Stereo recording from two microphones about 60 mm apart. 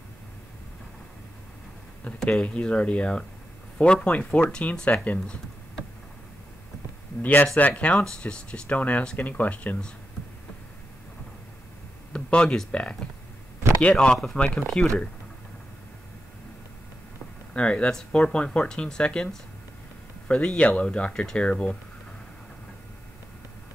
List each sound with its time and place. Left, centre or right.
2.2 s speech: centre
5.2 s computer keyboard: centre
7.2 s speech: left
12.1 s speech: centre
17.6 s speech: centre